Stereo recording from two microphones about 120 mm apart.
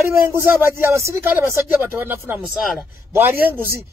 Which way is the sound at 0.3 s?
20° right (ahead or behind).